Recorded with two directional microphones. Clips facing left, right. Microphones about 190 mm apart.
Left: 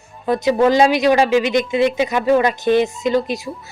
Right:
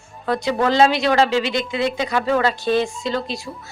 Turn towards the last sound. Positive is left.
turn(degrees=15)  # may be behind; listen again after turning